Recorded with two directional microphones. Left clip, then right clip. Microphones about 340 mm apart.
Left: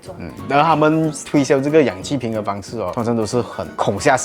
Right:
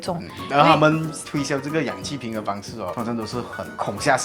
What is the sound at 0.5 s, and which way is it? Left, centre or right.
Speech, left.